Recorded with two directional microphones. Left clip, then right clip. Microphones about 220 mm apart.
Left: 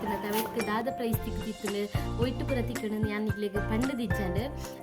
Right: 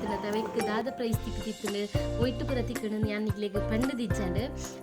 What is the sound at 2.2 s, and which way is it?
Speech, 5° left (ahead or behind).